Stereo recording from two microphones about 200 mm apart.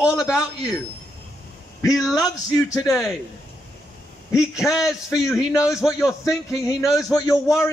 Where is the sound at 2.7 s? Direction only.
15° left (ahead or behind).